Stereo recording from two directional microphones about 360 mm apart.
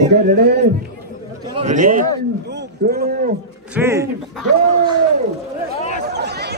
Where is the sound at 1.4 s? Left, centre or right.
Centre.